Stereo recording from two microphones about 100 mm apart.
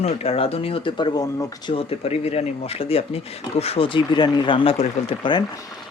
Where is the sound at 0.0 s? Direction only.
90° left; by 1.5 s 35° left (ahead or behind).